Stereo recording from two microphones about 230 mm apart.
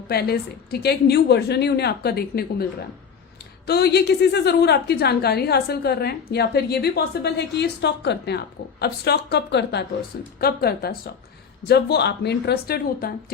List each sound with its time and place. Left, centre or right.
0.1 s a woman's voice: left
3.7 s a woman's voice: left